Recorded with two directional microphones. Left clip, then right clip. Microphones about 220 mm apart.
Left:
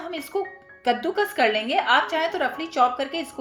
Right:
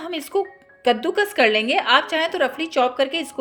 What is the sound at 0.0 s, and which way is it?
A woman's voice, 40° right (ahead or behind).